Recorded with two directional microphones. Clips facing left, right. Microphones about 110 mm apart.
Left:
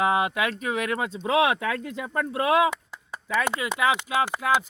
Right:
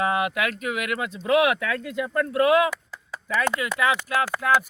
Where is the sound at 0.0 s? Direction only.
25° left (ahead or behind).